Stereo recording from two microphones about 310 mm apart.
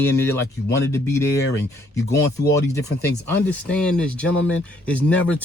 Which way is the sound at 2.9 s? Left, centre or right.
Left.